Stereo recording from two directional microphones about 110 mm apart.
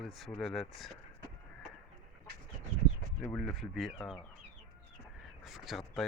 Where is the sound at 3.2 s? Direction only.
20° left (ahead or behind).